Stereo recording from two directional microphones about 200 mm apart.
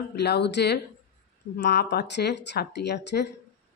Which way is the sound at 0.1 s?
60° left (ahead or behind).